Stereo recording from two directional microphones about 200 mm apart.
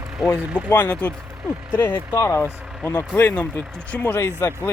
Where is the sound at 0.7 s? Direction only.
10° left (ahead or behind).